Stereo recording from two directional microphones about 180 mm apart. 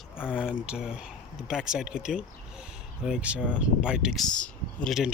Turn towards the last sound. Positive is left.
turn(degrees=0)  # may be behind; listen again after turning